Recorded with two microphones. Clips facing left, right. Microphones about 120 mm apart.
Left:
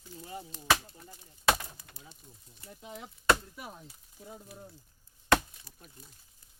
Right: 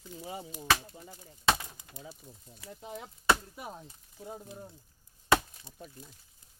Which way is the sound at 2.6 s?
90° right.